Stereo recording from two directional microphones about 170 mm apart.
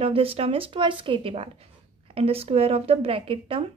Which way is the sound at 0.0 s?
35° right (ahead or behind).